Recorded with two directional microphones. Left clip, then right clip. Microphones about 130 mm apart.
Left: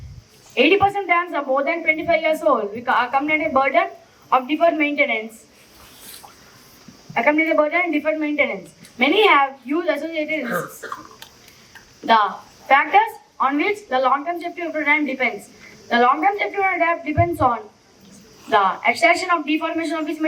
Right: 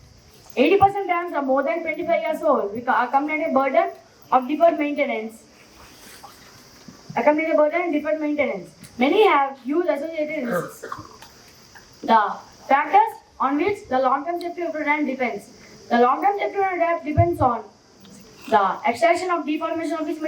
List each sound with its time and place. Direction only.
0.5 s a woman's voice: 30° left (ahead or behind)
7.1 s a woman's voice: 35° left (ahead or behind)
12.0 s a woman's voice: 30° left (ahead or behind)